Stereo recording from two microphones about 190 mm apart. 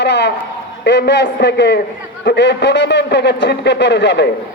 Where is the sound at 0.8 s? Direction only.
60° left (ahead or behind).